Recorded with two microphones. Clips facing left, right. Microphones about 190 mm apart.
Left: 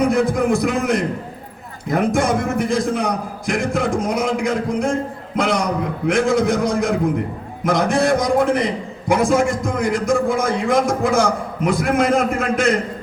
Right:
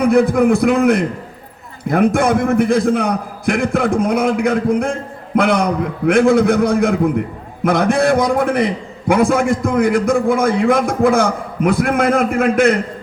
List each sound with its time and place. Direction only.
0.0 s a man's voice: 60° right (ahead or behind)